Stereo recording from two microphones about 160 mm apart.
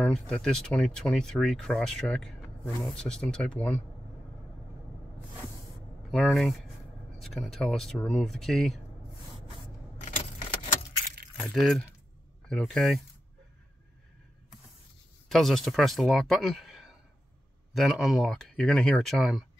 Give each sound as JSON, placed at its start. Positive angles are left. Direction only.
{"t": 0.0, "sound": "speech", "side_deg": 5}
{"t": 6.1, "sound": "speech", "side_deg": 5}
{"t": 9.9, "sound": "keys jangling", "side_deg": 50}
{"t": 11.4, "sound": "speech", "side_deg": 0}
{"t": 15.2, "sound": "speech", "side_deg": 0}